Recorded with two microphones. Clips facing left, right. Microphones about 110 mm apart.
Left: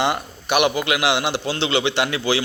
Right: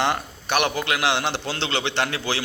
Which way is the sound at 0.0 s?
10° left (ahead or behind).